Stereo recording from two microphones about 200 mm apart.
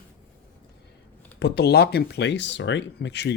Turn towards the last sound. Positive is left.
turn(degrees=60)  # may be behind; listen again after turning